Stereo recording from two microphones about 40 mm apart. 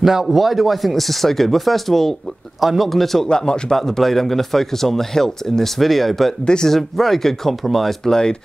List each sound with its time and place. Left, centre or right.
0.0 s a man's voice: centre
2.6 s a man's voice: centre
2.9 s a man's voice: centre
3.3 s speech: left
3.7 s a man's voice: centre
6.4 s speech: centre
6.7 s a man's voice: centre
8.0 s speech: centre